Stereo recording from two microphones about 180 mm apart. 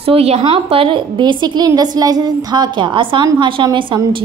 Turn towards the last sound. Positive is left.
turn(degrees=-25)  # may be behind; listen again after turning